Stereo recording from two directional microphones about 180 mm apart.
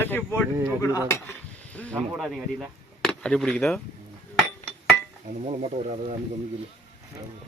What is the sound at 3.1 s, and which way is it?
Speech, 5° left (ahead or behind).